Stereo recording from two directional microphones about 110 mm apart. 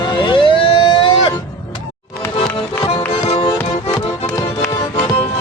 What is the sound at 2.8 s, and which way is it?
Music, 55° left (ahead or behind).